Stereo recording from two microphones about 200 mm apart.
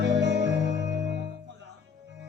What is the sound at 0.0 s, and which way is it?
Music, 60° right (ahead or behind).